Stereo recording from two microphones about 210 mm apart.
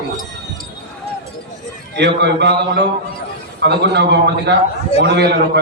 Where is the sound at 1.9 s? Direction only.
55° right (ahead or behind).